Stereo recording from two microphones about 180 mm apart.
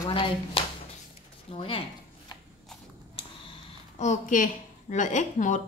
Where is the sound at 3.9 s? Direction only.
40° left (ahead or behind).